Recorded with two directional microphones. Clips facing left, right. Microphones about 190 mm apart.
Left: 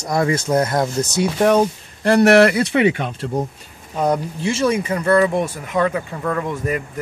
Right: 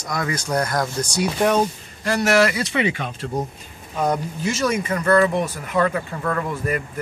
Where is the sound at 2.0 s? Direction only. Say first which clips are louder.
Left 6 dB; 60° left (ahead or behind).